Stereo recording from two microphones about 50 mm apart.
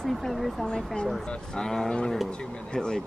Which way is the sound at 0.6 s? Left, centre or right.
Centre.